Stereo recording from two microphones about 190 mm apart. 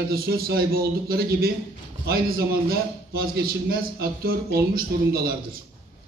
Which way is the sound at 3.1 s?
50° right (ahead or behind).